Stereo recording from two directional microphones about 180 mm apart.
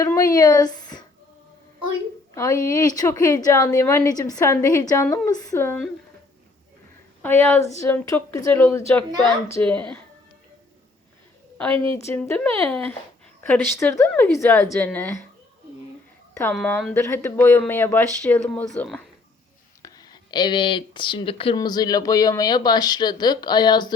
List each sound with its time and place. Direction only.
0.0 s a sound: 20° left (ahead or behind)
2.3 s a woman's voice: 15° left (ahead or behind)
7.2 s a woman's voice: 10° left (ahead or behind)
12.0 s a woman's voice: 10° left (ahead or behind)
16.3 s a woman's voice: 15° left (ahead or behind)
19.8 s speech: 20° left (ahead or behind)